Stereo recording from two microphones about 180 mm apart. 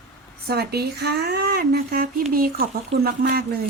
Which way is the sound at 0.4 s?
60° right (ahead or behind).